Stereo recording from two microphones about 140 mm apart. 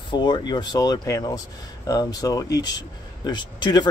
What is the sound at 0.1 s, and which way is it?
Speech, 30° left (ahead or behind).